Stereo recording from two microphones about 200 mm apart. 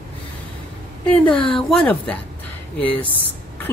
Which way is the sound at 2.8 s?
25° left (ahead or behind).